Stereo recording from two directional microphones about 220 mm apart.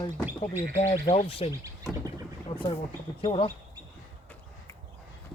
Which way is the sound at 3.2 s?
25° left (ahead or behind).